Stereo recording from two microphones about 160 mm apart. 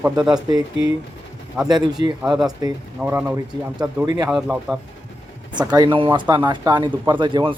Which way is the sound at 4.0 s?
25° right (ahead or behind).